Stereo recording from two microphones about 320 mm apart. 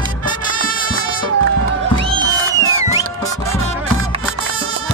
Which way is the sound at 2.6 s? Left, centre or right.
Right.